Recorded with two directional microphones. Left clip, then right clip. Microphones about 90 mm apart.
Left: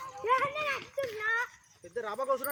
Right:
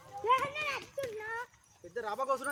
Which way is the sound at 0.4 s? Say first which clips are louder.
Left 4 dB; 5° right (ahead or behind).